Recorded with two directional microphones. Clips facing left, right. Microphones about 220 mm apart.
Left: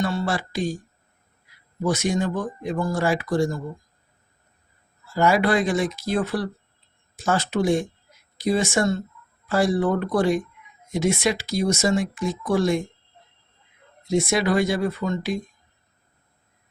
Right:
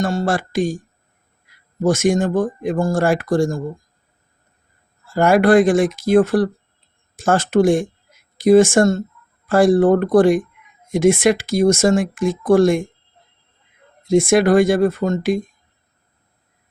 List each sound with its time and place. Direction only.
0.0 s speech: 45° right (ahead or behind)
1.8 s speech: 50° right (ahead or behind)
5.0 s speech: 50° right (ahead or behind)
14.1 s speech: 50° right (ahead or behind)